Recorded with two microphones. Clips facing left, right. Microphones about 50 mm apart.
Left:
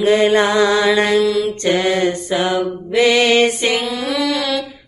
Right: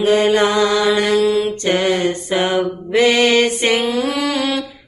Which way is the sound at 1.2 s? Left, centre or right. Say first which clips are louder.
Even; right.